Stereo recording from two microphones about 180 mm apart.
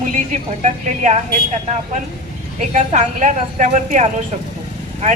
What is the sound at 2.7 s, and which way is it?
A woman's voice, 45° right (ahead or behind).